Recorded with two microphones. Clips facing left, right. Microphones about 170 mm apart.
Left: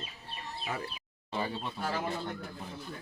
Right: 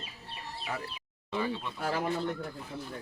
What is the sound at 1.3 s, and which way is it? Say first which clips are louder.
Speech: right 2 dB; 35° left (ahead or behind).